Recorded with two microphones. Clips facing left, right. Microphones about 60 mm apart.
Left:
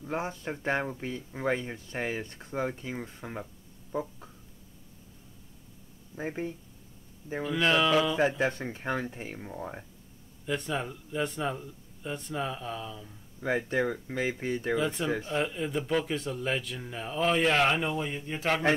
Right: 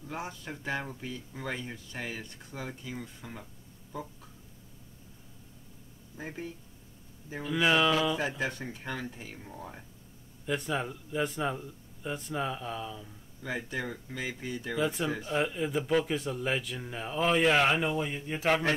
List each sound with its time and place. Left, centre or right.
0.0 s speech: left
3.9 s a sound: left
6.1 s speech: left
7.4 s speech: centre
8.2 s speech: left
10.4 s speech: centre
13.4 s speech: left
14.8 s speech: centre